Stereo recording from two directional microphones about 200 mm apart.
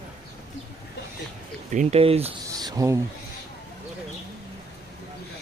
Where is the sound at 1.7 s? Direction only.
35° right (ahead or behind).